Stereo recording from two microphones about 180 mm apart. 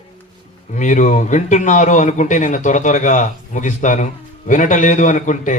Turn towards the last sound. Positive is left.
turn(degrees=45)  # may be behind; listen again after turning